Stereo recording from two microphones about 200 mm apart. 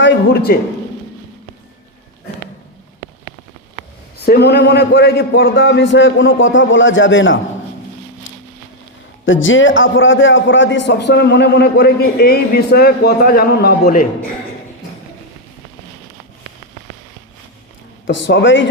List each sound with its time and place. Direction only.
0.0 s a man's voice: 55° left (ahead or behind)
4.3 s a man's voice: 55° left (ahead or behind); by 7.3 s 70° left (ahead or behind)
8.3 s a sound: 75° left (ahead or behind)
9.2 s a man's voice: 75° left (ahead or behind); by 14.1 s 45° left (ahead or behind)
18.0 s a man's voice: 65° left (ahead or behind)